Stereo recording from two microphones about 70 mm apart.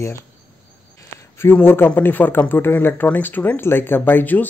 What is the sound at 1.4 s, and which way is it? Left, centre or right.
Speech, left.